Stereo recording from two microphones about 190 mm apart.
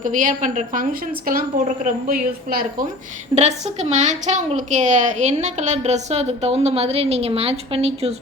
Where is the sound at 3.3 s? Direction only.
35° right (ahead or behind).